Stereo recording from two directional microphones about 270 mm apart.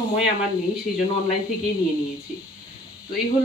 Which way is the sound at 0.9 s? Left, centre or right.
Left.